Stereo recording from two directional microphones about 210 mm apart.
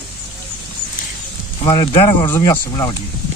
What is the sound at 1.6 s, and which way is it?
A man's voice, 20° left (ahead or behind).